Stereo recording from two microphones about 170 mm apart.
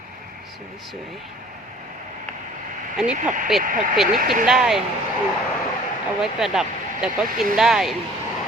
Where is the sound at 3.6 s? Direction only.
50° right (ahead or behind).